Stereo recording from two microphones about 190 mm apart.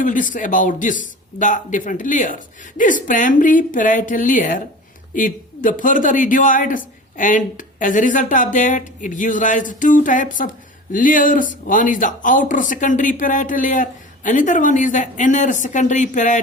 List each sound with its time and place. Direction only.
0.0 s a man's voice: 45° left (ahead or behind)